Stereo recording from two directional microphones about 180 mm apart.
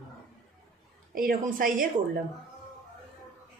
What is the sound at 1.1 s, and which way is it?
Speech, 50° right (ahead or behind).